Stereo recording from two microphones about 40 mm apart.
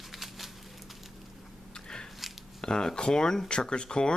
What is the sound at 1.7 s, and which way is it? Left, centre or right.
Biting, centre.